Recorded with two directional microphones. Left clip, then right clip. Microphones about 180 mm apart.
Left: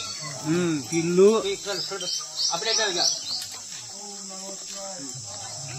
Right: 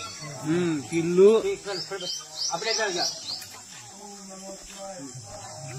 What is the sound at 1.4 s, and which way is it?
Speech, 5° right (ahead or behind).